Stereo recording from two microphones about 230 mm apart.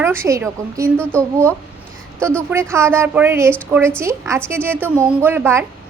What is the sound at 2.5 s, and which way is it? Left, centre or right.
A woman's voice, centre.